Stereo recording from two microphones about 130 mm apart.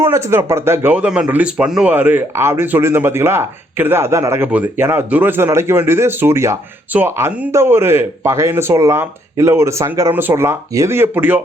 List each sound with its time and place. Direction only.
0.0 s speech: 20° right (ahead or behind)